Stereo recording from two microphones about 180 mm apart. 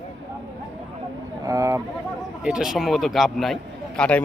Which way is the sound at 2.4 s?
5° right (ahead or behind).